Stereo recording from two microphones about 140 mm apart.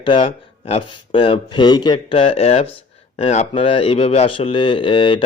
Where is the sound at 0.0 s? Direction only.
40° left (ahead or behind).